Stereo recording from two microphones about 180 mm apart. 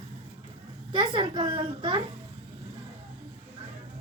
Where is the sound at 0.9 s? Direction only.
25° right (ahead or behind).